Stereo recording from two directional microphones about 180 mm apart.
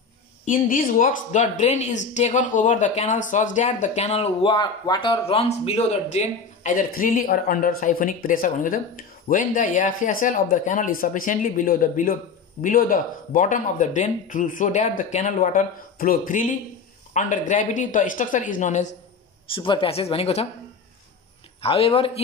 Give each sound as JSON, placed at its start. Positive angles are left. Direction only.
{"t": 0.5, "sound": "speech", "side_deg": 45}
{"t": 19.5, "sound": "speech", "side_deg": 30}
{"t": 21.5, "sound": "speech", "side_deg": 30}